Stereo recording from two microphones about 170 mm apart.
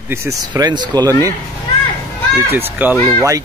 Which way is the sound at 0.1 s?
20° right (ahead or behind).